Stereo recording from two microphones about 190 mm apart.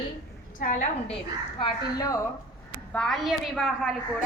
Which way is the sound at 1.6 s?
20° left (ahead or behind).